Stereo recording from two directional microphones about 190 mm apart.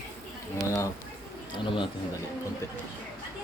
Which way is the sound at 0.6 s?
20° left (ahead or behind).